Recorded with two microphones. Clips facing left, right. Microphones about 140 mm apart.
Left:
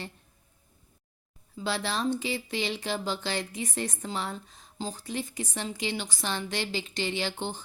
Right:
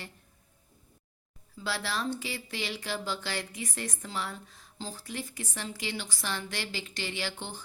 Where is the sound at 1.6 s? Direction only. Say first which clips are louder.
Left 4 dB; 20° left (ahead or behind).